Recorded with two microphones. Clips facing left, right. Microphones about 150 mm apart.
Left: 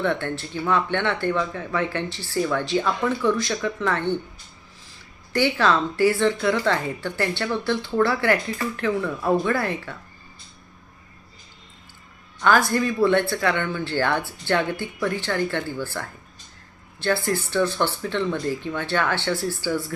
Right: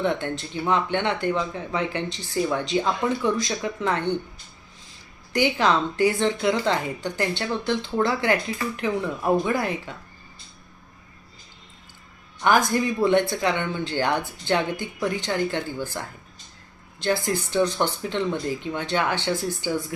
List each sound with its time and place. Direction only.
0.0 s a woman's voice: 15° right (ahead or behind)
5.3 s a woman's voice: 15° right (ahead or behind)
12.4 s a woman's voice: 15° right (ahead or behind)